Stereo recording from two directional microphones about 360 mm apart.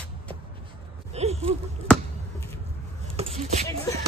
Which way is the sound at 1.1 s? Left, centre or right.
Centre.